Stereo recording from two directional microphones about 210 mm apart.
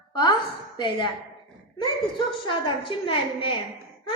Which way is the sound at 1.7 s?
25° left (ahead or behind).